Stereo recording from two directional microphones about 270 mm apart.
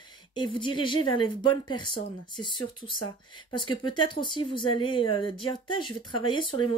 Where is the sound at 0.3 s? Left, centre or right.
Centre.